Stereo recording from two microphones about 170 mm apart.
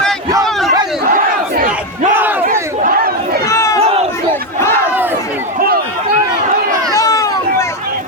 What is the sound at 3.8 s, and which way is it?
Crowd, 35° right (ahead or behind).